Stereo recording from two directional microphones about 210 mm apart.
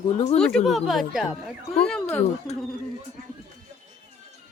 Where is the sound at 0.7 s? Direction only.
Centre (ahead or behind).